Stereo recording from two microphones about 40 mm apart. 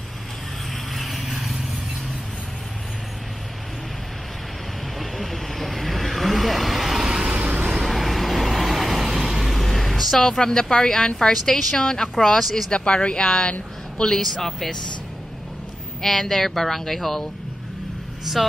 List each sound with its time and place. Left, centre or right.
0.9 s vehicle: centre
4.9 s vehicle: centre
7.1 s vehicle: centre
7.3 s vehicle: right
7.7 s vehicle: centre
11.8 s speech: centre
12.7 s speech: left
14.0 s speech: centre
16.0 s speech: centre